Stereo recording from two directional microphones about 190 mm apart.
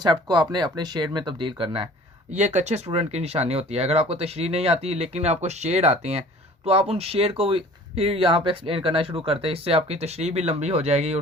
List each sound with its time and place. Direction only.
0.0 s speech: 25° right (ahead or behind)